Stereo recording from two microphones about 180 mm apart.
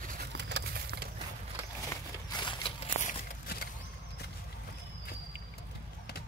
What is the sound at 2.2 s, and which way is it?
Horse, 25° left (ahead or behind).